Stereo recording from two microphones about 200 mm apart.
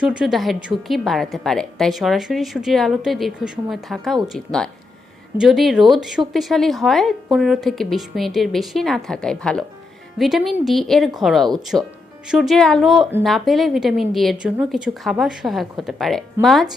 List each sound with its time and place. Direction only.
0.0 s a woman's voice: 5° right (ahead or behind)